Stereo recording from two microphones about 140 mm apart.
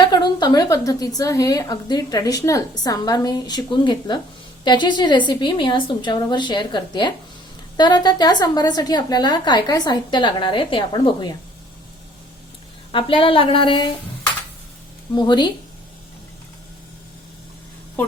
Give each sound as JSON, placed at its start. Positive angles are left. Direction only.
{"t": 0.0, "sound": "a woman's voice", "side_deg": 30}
{"t": 12.9, "sound": "a woman's voice", "side_deg": 40}
{"t": 15.1, "sound": "a woman's voice", "side_deg": 30}